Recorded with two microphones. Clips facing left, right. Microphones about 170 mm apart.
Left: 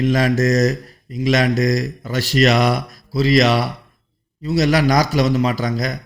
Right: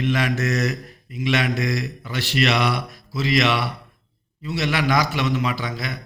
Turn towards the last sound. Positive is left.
turn(degrees=40)  # may be behind; listen again after turning